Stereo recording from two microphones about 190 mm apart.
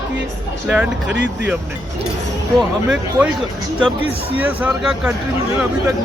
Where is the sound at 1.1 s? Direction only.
70° right (ahead or behind).